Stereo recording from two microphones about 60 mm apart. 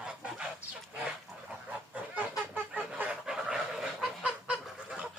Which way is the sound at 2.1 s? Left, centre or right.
Right.